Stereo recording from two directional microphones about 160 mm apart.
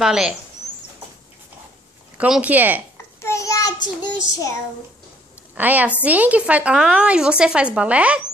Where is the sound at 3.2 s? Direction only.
20° left (ahead or behind).